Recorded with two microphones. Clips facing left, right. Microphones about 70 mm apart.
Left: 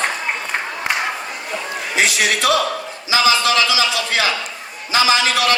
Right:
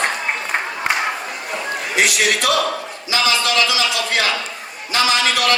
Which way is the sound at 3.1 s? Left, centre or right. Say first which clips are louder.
Left 3 dB; centre.